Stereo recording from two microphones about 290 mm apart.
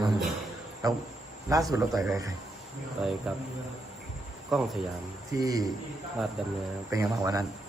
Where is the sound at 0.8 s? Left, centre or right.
Centre.